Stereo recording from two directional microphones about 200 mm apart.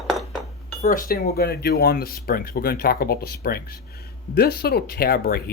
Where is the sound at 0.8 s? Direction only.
45° left (ahead or behind).